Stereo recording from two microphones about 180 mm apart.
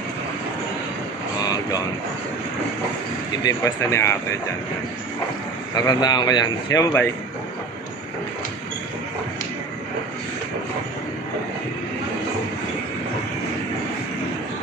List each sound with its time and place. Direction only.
1.4 s boat: 20° left (ahead or behind)
3.4 s speech: 15° left (ahead or behind)
5.8 s speech: 20° left (ahead or behind)